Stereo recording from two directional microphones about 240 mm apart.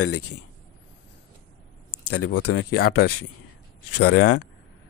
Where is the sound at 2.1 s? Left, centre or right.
Left.